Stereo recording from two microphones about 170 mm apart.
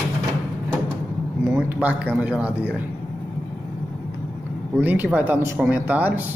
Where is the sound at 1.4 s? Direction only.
10° right (ahead or behind).